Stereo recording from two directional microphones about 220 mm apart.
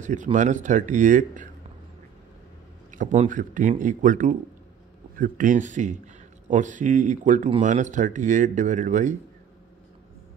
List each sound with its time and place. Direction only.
0.0 s speech: 35° right (ahead or behind)
2.9 s speech: 35° right (ahead or behind)